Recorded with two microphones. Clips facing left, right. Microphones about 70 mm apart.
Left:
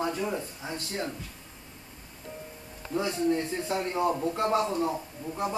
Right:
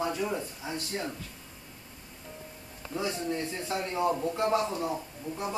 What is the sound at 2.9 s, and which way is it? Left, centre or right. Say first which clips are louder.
Speech: left 5 dB; left.